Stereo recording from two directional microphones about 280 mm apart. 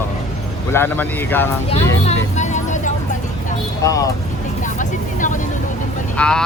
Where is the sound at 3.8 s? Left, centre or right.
Centre.